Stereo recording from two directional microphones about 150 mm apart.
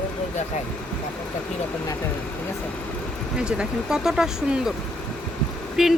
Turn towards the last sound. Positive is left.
turn(degrees=-5)  # may be behind; listen again after turning